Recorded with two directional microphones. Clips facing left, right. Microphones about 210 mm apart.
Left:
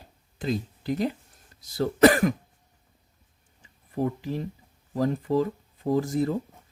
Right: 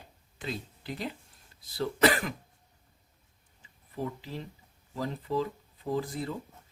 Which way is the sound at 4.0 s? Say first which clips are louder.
Left 8 dB; 50° left (ahead or behind).